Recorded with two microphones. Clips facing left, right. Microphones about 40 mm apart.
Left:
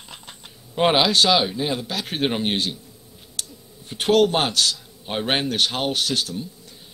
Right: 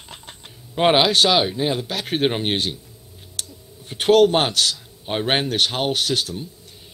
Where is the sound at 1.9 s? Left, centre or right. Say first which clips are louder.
Right 3 dB; right.